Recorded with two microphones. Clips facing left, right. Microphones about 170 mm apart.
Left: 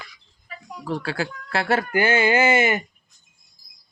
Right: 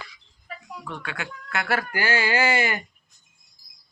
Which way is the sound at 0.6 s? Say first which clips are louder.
Left 8 dB; 35° left (ahead or behind).